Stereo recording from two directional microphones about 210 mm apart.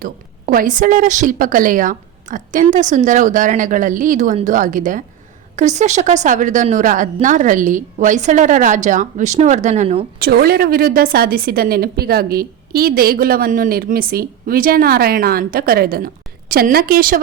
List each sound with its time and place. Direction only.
0.0 s a woman's voice: 40° right (ahead or behind)
10.2 s a woman's voice: 45° right (ahead or behind)